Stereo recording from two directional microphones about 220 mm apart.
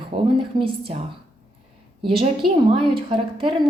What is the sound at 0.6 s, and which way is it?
Speech, 25° right (ahead or behind).